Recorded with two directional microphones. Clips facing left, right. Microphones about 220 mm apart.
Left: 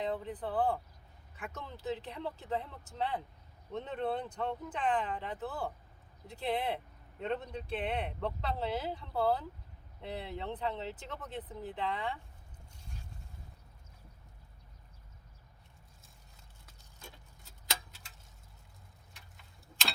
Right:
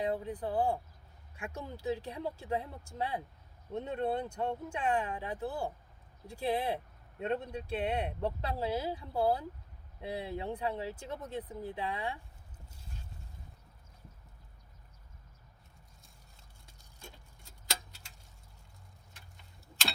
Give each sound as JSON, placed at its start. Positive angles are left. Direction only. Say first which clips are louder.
{"t": 0.0, "sound": "speech", "louder": "right 2 dB", "side_deg": -10}